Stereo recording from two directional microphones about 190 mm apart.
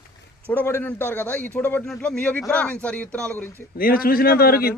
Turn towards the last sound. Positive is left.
turn(degrees=50)  # may be behind; listen again after turning